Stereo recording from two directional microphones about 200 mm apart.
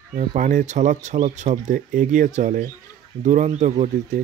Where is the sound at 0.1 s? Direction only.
35° right (ahead or behind).